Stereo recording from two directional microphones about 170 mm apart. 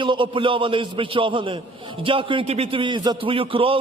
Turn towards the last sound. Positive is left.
turn(degrees=-30)  # may be behind; listen again after turning